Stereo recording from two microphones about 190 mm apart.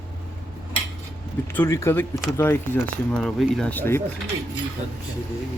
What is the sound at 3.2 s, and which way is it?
Speech, centre (ahead or behind).